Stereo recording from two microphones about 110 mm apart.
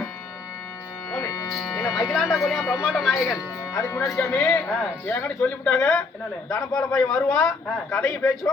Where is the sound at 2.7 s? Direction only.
Centre (ahead or behind).